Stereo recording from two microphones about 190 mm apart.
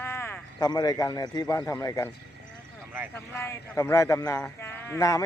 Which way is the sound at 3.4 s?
15° left (ahead or behind).